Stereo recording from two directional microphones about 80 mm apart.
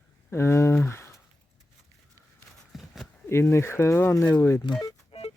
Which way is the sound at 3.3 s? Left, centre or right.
Left.